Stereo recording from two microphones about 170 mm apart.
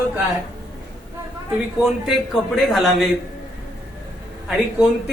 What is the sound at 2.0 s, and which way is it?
A man's voice, centre (ahead or behind).